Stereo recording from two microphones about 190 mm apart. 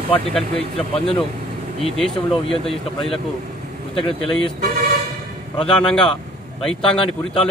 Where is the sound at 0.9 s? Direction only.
30° left (ahead or behind).